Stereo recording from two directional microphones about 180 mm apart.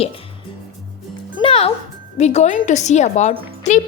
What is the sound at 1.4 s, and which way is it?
A woman's voice, 35° left (ahead or behind).